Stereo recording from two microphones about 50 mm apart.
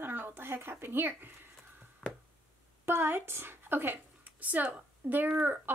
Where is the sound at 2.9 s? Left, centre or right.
Right.